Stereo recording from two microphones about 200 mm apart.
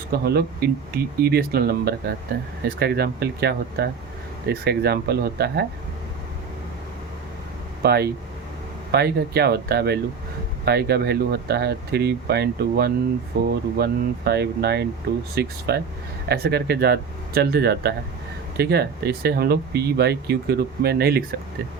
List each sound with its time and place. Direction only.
0.1 s speech: 50° right (ahead or behind)
7.8 s speech: 50° right (ahead or behind)